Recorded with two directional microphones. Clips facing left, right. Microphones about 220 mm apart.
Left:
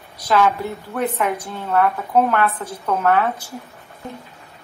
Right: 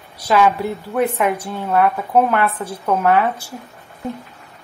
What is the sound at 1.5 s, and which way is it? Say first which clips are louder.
A woman's voice: right 1 dB; 15° right (ahead or behind).